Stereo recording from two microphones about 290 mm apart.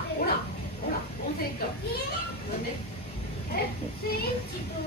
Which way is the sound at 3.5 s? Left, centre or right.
Left.